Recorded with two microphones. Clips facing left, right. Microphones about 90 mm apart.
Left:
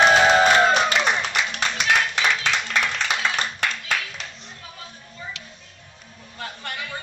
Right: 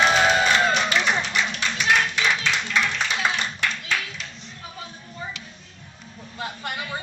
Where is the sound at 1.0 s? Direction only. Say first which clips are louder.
Left 1 dB; 50° left (ahead or behind).